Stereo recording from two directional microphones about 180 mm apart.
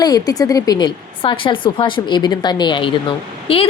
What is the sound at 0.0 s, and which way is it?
A woman's voice, 20° left (ahead or behind).